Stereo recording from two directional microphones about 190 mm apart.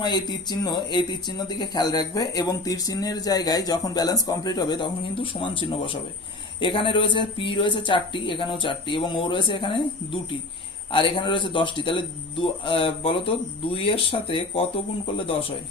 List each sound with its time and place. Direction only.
0.0 s speech: 20° left (ahead or behind)
10.9 s speech: 25° left (ahead or behind)